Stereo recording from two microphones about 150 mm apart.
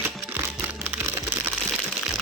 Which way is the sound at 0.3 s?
10° right (ahead or behind).